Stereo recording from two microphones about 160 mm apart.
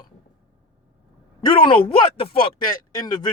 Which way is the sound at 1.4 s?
30° left (ahead or behind).